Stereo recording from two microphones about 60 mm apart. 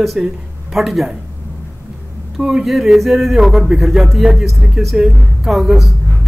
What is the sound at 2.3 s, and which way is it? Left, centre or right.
A woman's voice, centre.